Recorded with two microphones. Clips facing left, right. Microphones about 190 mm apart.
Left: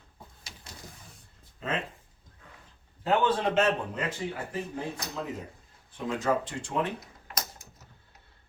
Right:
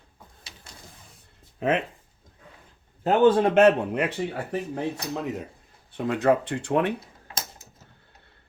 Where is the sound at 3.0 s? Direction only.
45° right (ahead or behind); by 4.6 s 65° right (ahead or behind).